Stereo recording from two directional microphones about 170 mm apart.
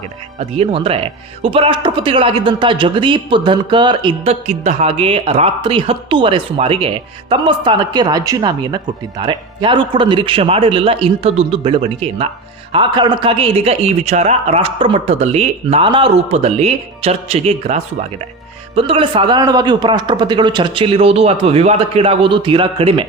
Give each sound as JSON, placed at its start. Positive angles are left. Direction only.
{"t": 0.3, "sound": "speech", "side_deg": -35}